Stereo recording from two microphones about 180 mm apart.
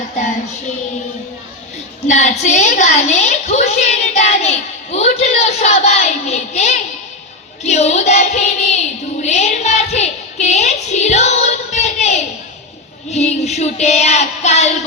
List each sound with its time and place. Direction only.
2.0 s a woman's voice: 40° left (ahead or behind)
9.2 s a sound: 40° left (ahead or behind)
13.1 s child singing: 40° left (ahead or behind)